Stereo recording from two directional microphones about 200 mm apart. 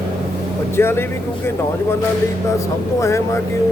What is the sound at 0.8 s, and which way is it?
Speech, 10° left (ahead or behind).